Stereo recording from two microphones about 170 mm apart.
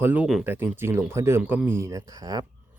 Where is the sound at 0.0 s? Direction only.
10° right (ahead or behind).